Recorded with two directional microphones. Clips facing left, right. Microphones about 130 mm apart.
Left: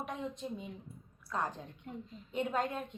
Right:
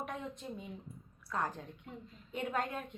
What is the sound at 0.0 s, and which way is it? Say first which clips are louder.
A woman's voice: left 2 dB; 25° left (ahead or behind).